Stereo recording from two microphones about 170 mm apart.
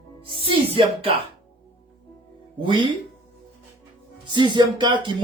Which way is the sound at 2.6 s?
30° right (ahead or behind).